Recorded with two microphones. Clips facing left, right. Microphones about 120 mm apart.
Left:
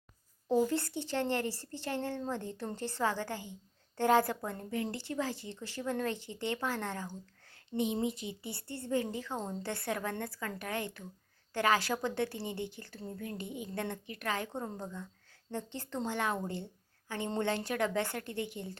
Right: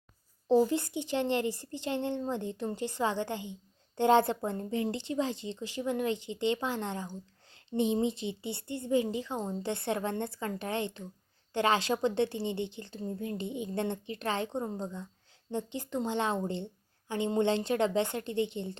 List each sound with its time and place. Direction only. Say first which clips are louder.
0.4 s speech: right 4 dB; 30° right (ahead or behind)
0.7 s speech: right 3 dB; 15° right (ahead or behind)